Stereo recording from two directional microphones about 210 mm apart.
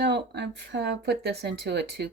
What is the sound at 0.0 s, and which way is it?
A woman's voice, 50° right (ahead or behind).